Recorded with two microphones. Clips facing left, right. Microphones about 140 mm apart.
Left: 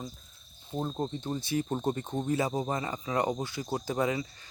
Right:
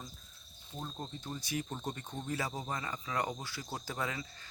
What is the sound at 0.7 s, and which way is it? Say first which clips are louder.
Speech: left 11 dB; 35° left (ahead or behind).